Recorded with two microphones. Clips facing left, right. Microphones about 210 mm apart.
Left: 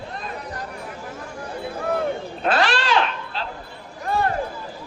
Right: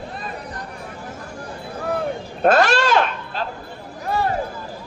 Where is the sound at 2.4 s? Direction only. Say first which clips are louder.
Right 6 dB; 45° right (ahead or behind).